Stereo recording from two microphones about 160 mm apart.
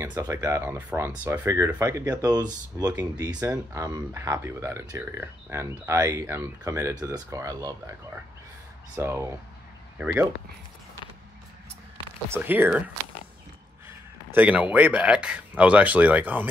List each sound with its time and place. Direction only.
0.0 s speech: 15° right (ahead or behind)
12.3 s a man's voice: 10° right (ahead or behind)